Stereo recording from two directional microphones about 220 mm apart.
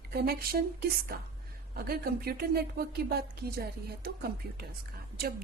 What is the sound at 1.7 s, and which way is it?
A woman's voice, 45° right (ahead or behind).